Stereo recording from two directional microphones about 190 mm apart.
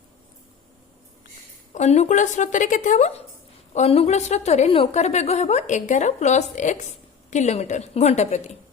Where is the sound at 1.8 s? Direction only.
35° left (ahead or behind).